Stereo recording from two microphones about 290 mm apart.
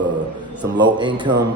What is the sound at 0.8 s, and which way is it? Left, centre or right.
Speech, centre.